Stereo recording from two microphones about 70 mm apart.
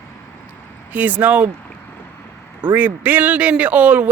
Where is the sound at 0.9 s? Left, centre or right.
Right.